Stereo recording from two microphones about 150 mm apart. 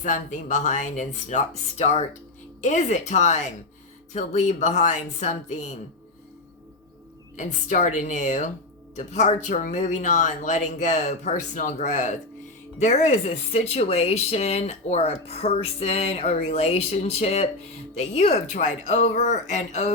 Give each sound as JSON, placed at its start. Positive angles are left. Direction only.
{"t": 0.0, "sound": "speech", "side_deg": 60}
{"t": 7.3, "sound": "speech", "side_deg": 55}